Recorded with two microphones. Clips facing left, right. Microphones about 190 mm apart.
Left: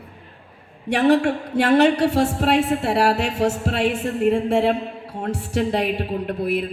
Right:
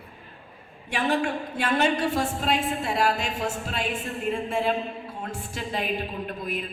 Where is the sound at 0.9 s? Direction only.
70° left (ahead or behind).